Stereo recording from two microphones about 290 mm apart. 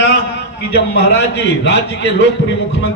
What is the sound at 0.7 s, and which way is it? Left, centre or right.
A man's voice, left.